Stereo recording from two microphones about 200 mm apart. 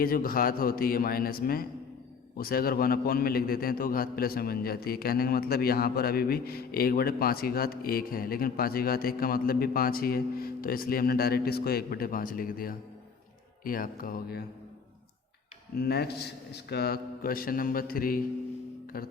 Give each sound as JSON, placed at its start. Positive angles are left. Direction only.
{"t": 0.0, "sound": "a man's voice", "side_deg": 45}
{"t": 15.7, "sound": "a man's voice", "side_deg": 50}